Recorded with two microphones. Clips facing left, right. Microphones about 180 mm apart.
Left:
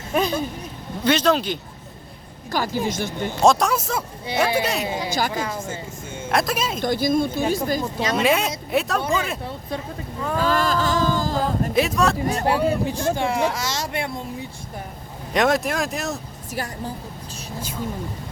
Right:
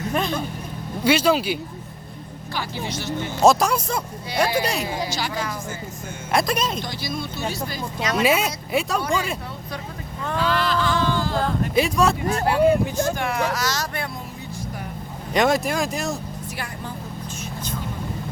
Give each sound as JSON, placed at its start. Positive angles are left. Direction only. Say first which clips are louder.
{"t": 0.1, "sound": "speech", "louder": "left 4 dB", "side_deg": 0}
{"t": 1.0, "sound": "speech", "louder": "even", "side_deg": -10}
{"t": 2.5, "sound": "speech", "louder": "left 6 dB", "side_deg": 45}
{"t": 3.4, "sound": "speech", "louder": "right 1 dB", "side_deg": 0}
{"t": 5.3, "sound": "speech", "louder": "left 2 dB", "side_deg": 25}
{"t": 6.3, "sound": "speech", "louder": "right 1 dB", "side_deg": 5}
{"t": 6.7, "sound": "speech", "louder": "left 9 dB", "side_deg": 50}
{"t": 8.1, "sound": "speech", "louder": "even", "side_deg": -5}
{"t": 10.3, "sound": "a sound", "louder": "left 1 dB", "side_deg": 45}
{"t": 11.7, "sound": "speech", "louder": "right 1 dB", "side_deg": 0}
{"t": 12.3, "sound": "speech", "louder": "right 3 dB", "side_deg": 35}
{"t": 15.3, "sound": "speech", "louder": "even", "side_deg": 0}